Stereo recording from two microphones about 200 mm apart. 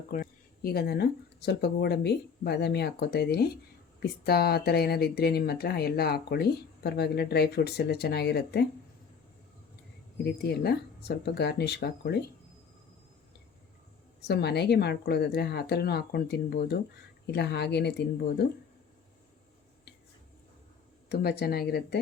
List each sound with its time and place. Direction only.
0.1 s speech: 45° left (ahead or behind)
10.4 s speech: 55° left (ahead or behind)
14.3 s speech: 55° left (ahead or behind)
21.1 s speech: 50° left (ahead or behind)